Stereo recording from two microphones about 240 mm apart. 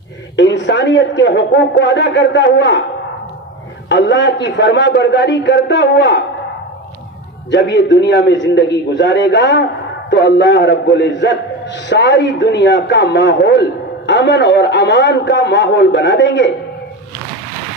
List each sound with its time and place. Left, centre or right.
0.3 s a man's voice: left
3.8 s a man's voice: left
7.5 s a man's voice: left